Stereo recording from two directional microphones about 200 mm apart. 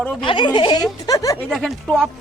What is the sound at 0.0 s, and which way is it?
Speech, 5° left (ahead or behind).